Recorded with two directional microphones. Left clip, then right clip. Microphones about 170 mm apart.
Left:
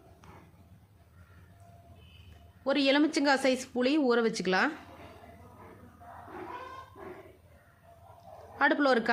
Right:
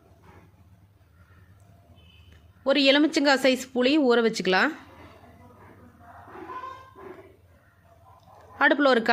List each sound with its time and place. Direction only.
2.6 s speech: 20° right (ahead or behind)
8.5 s speech: 20° right (ahead or behind)